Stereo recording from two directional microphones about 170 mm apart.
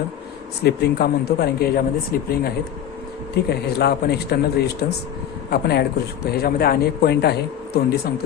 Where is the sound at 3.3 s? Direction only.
70° left (ahead or behind).